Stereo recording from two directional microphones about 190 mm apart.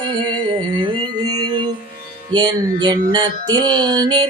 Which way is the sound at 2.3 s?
20° right (ahead or behind).